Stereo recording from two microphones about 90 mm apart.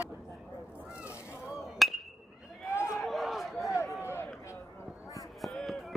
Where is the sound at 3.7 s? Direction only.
35° left (ahead or behind).